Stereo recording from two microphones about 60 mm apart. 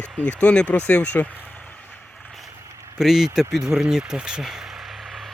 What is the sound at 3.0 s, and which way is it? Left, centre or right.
Speech, centre.